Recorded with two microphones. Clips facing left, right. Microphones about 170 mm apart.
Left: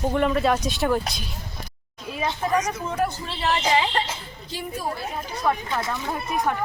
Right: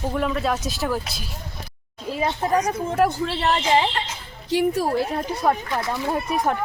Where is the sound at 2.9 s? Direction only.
70° right (ahead or behind).